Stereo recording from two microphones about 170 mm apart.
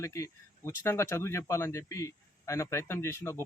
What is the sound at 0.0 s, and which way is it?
Speech, 15° left (ahead or behind).